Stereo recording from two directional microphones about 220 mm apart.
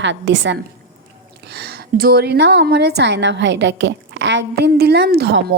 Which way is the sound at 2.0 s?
45° right (ahead or behind).